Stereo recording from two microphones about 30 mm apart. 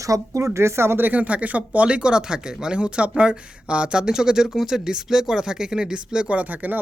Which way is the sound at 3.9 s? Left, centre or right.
Right.